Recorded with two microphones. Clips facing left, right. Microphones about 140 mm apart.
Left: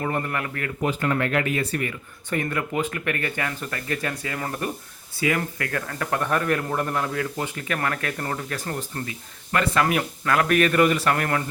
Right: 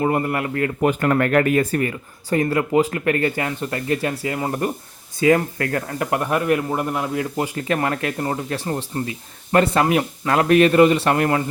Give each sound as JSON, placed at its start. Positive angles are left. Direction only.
{"t": 0.0, "sound": "speech", "side_deg": -25}
{"t": 0.8, "sound": "speech", "side_deg": -55}